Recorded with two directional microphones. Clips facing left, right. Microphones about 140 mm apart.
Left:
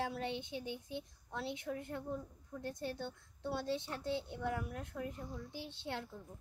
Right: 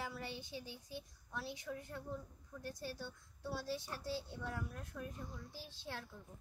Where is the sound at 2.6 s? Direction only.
25° left (ahead or behind).